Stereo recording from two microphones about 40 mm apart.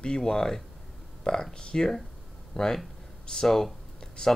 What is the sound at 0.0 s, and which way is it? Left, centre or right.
Speech, centre.